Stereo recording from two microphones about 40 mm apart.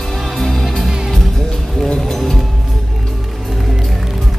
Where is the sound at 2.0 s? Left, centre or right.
Centre.